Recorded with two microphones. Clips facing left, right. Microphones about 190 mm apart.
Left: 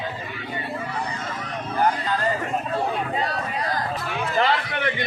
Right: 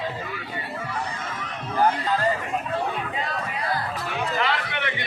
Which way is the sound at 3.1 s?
40° left (ahead or behind).